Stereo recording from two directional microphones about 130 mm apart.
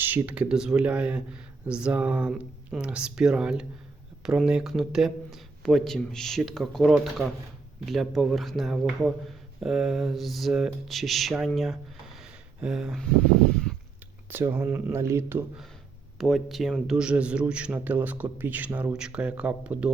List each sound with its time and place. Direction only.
0.0 s a man's voice: 10° right (ahead or behind)
12.2 s a sound: 5° right (ahead or behind)
14.3 s a man's voice: 15° right (ahead or behind)
16.1 s a man's voice: centre (ahead or behind)